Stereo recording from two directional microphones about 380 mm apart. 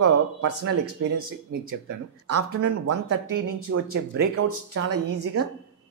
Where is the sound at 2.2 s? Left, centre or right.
Right.